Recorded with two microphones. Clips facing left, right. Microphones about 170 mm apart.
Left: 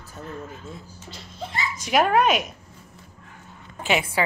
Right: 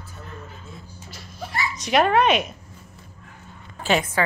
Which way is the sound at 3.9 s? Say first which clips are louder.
Right 2 dB; 10° left (ahead or behind).